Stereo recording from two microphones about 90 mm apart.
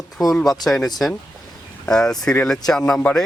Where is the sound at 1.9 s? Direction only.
5° left (ahead or behind).